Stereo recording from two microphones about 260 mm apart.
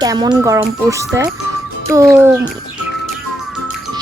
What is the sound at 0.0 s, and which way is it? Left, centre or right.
A child's voice, centre.